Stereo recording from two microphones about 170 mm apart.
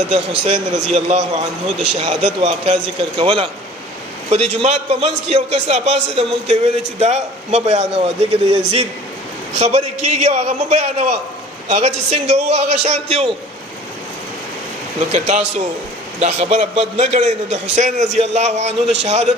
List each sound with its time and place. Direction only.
0.5 s a man's voice: 40° right (ahead or behind)
15.1 s a man's voice: 40° right (ahead or behind)